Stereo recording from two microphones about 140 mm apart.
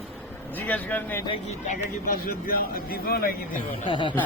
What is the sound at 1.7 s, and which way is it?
Speech, 85° left.